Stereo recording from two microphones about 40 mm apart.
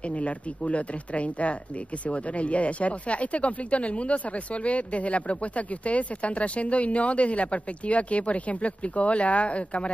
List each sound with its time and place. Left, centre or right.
0.1 s speech: left